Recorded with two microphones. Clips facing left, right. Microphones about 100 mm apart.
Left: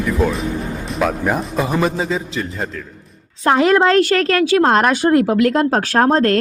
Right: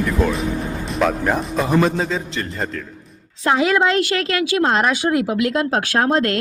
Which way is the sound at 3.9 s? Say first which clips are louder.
Left 5 dB; 40° left (ahead or behind).